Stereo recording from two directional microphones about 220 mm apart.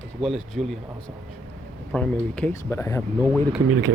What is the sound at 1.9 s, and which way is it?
Speech, 5° left (ahead or behind).